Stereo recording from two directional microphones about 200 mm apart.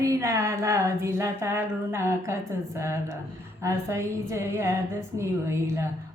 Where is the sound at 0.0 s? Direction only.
15° right (ahead or behind).